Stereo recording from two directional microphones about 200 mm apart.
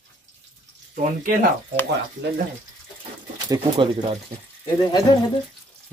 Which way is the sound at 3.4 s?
20° right (ahead or behind).